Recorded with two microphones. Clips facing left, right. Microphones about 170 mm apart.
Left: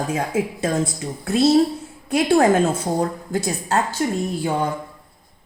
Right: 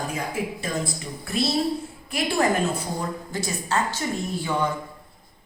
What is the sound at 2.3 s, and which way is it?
Speech, 90° left.